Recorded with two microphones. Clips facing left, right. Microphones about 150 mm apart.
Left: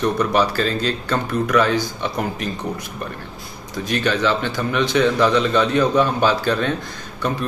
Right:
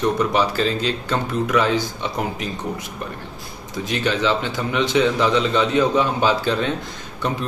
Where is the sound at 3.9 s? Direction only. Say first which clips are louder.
Left 1 dB; 20° right (ahead or behind).